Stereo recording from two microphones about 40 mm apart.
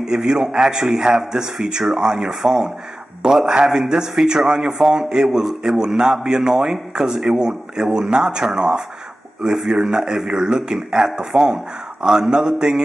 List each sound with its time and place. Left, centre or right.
0.0 s a man's voice: centre
4.7 s a man's voice: centre